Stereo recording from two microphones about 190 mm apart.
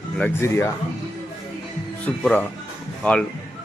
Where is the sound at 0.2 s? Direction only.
10° left (ahead or behind).